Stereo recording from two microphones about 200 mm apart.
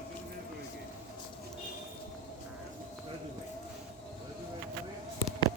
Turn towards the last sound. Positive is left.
turn(degrees=20)  # may be behind; listen again after turning